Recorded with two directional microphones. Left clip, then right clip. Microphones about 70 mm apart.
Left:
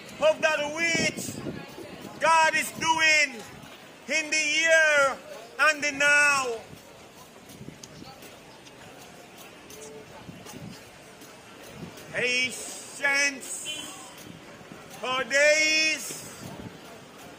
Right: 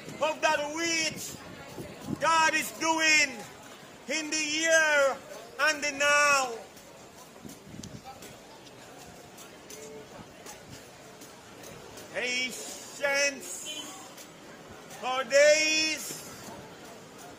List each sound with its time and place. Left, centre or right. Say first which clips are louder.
0.2 s a man's voice: left 4 dB; right
2.1 s a man's voice: left 3 dB; right
12.1 s a man's voice: left 5 dB; right
13.5 s a sound: left 3 dB; right
15.0 s a man's voice: even; right